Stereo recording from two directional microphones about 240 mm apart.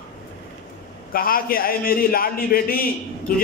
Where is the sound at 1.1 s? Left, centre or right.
Left.